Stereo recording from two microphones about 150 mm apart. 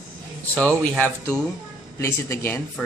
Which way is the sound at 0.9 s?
10° left (ahead or behind).